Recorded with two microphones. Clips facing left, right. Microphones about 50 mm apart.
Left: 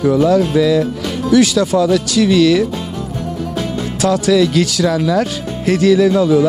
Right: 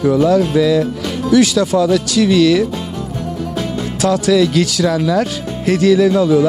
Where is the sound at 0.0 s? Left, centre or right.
Left.